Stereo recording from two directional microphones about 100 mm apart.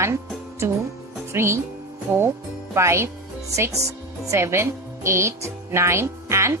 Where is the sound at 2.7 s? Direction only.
25° right (ahead or behind).